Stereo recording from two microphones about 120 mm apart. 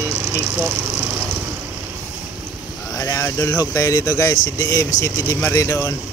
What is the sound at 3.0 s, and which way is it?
Speech, 25° left (ahead or behind).